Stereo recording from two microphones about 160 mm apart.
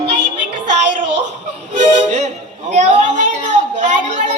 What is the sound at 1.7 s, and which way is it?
Music, 45° right (ahead or behind).